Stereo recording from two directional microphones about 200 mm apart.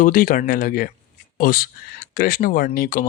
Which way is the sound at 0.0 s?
40° left (ahead or behind).